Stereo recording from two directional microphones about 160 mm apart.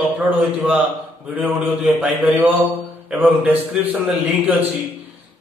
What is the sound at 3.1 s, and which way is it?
A man's voice, 10° right (ahead or behind).